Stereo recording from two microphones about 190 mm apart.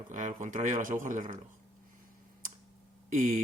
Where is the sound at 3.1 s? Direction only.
45° right (ahead or behind).